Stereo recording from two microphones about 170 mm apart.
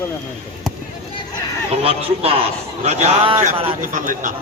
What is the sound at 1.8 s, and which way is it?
Speech, 35° right (ahead or behind).